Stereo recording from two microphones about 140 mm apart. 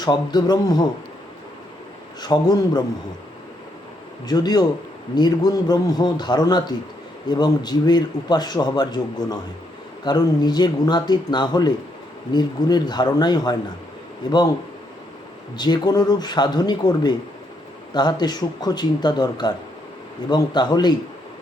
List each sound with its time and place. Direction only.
0.0 s a man's voice: 30° left (ahead or behind)
2.2 s a man's voice: 30° left (ahead or behind)
4.3 s a man's voice: 30° left (ahead or behind)
15.5 s a man's voice: 30° left (ahead or behind)